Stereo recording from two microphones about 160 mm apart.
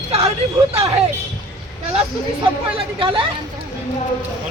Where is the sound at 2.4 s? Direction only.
35° right (ahead or behind).